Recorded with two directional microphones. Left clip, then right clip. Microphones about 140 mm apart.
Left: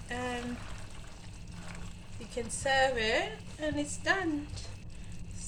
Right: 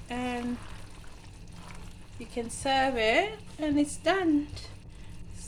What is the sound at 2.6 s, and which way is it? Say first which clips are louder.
A woman's voice: right 2 dB; 80° right.